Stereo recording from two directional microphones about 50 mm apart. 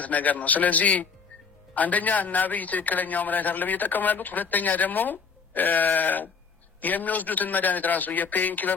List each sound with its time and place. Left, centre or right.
0.0 s a man's voice: left